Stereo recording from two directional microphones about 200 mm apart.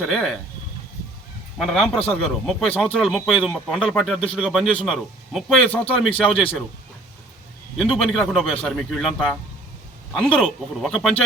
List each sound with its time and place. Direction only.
0.0 s speech: centre (ahead or behind)
1.5 s speech: centre (ahead or behind)
7.8 s speech: centre (ahead or behind)